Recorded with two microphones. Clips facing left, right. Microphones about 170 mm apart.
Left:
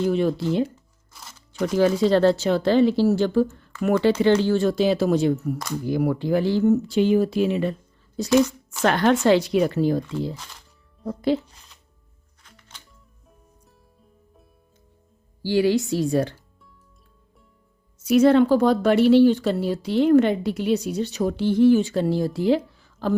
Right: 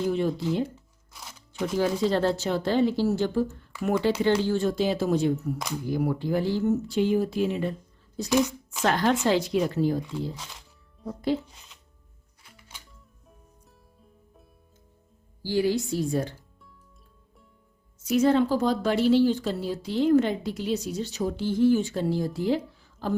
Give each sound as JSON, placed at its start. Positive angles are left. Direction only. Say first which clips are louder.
{"t": 0.1, "sound": "speech", "louder": "left 4 dB", "side_deg": 90}
{"t": 1.1, "sound": "music", "louder": "even", "side_deg": 0}
{"t": 1.5, "sound": "speech", "louder": "left 6 dB", "side_deg": 90}
{"t": 10.3, "sound": "speech", "louder": "left 1 dB", "side_deg": 0}
{"t": 11.0, "sound": "speech", "louder": "left 5 dB", "side_deg": 85}
{"t": 11.5, "sound": "music", "louder": "even", "side_deg": 0}
{"t": 15.4, "sound": "speech", "louder": "left 5 dB", "side_deg": 80}
{"t": 18.0, "sound": "speech", "louder": "left 6 dB", "side_deg": 70}